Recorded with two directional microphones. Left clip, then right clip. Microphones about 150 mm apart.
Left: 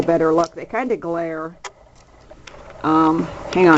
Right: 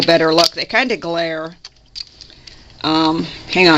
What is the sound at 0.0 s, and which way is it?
Speech, 45° right (ahead or behind).